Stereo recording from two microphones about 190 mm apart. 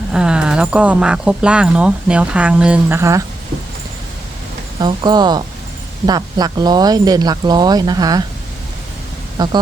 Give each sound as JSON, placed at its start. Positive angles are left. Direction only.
{"t": 0.1, "sound": "speech", "side_deg": -5}
{"t": 4.8, "sound": "speech", "side_deg": -20}
{"t": 9.4, "sound": "speech", "side_deg": -20}